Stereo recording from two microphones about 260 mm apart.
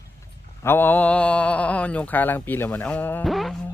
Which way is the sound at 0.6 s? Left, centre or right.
Centre.